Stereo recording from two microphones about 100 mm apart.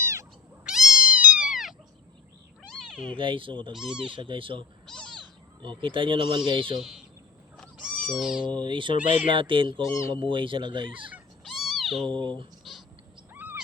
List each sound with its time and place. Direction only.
0.0 s cat: 30° right (ahead or behind)
0.6 s cat: 5° right (ahead or behind)
2.6 s cat: 5° left (ahead or behind)
3.2 s speech: 55° right (ahead or behind)
3.8 s speech: 5° right (ahead or behind)
4.1 s speech: 60° right (ahead or behind)
4.9 s cat: 10° left (ahead or behind)
5.6 s speech: 60° right (ahead or behind)
6.7 s speech: 5° right (ahead or behind)
7.8 s cat: 5° right (ahead or behind)
8.4 s speech: 50° right (ahead or behind)
11.4 s cat: 5° right (ahead or behind)
12.0 s speech: 55° right (ahead or behind)
13.3 s owl: 20° right (ahead or behind)